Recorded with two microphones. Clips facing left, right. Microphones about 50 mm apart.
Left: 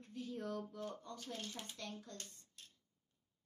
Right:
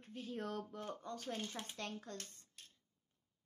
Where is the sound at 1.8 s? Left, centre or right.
Right.